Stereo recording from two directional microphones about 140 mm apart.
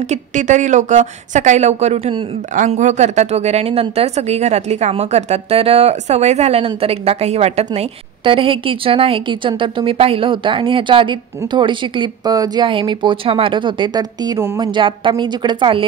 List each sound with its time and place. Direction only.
0.1 s a woman's voice: 60° right (ahead or behind); by 15.8 s 35° right (ahead or behind)